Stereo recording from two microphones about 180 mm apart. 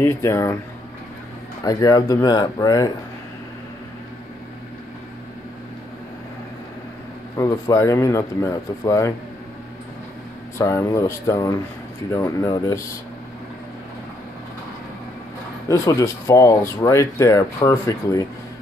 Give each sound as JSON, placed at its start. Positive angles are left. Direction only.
{"t": 0.0, "sound": "speech", "side_deg": 15}
{"t": 1.6, "sound": "speech", "side_deg": 20}
{"t": 7.3, "sound": "speech", "side_deg": 15}
{"t": 10.6, "sound": "speech", "side_deg": 15}
{"t": 15.7, "sound": "speech", "side_deg": 15}